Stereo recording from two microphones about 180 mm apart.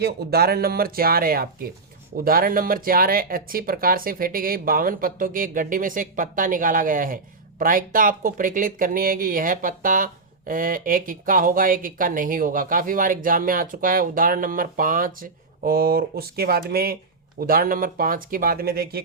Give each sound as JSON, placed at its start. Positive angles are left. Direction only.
{"t": 0.0, "sound": "speech", "side_deg": -60}